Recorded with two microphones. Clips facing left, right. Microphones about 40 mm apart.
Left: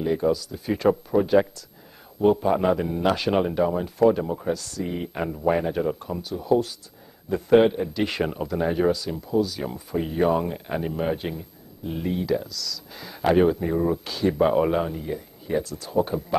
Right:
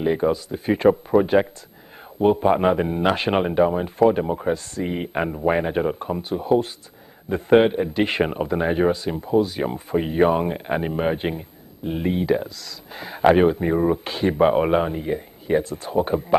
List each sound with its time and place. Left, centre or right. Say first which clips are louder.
0.0 s speech: right 2 dB; right